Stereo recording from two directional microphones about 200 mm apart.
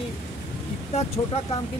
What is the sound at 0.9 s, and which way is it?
Speech, 30° left (ahead or behind).